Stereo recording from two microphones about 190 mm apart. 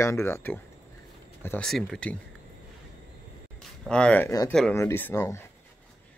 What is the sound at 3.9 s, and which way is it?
Speech, 5° left (ahead or behind).